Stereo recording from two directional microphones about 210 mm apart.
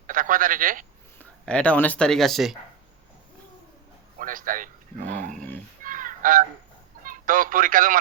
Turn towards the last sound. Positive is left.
turn(degrees=-40)  # may be behind; listen again after turning